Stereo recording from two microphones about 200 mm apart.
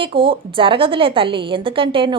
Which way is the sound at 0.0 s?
25° right (ahead or behind).